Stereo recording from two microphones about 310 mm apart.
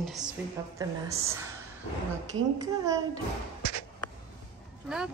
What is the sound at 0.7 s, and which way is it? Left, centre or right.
Speech, centre.